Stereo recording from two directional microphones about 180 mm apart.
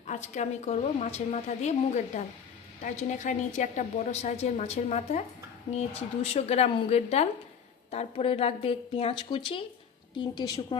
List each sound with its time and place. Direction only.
0.1 s a woman's voice: 40° left (ahead or behind); by 10.8 s 25° left (ahead or behind)